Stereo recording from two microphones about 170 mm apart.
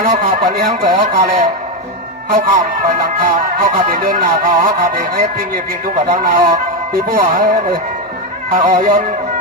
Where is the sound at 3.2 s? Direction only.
55° right (ahead or behind).